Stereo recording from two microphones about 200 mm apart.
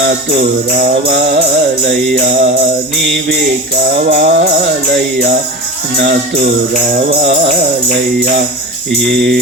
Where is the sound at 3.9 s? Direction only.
50° right (ahead or behind).